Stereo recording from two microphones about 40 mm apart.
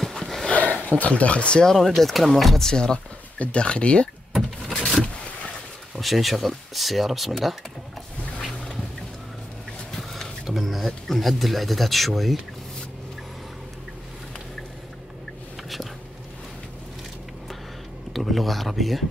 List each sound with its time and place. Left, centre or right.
0.2 s a sound: centre
0.5 s a sound: left
0.8 s speech: left
1.8 s speech: centre
2.7 s speech: left
4.3 s power windows: centre
5.9 s speech: centre
9.8 s a sound: centre
11.1 s speech: centre
18.1 s speech: centre